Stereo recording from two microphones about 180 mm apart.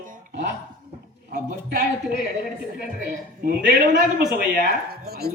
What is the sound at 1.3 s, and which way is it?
Speech, 55° right (ahead or behind).